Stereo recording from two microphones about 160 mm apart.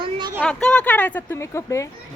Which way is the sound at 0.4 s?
5° left (ahead or behind).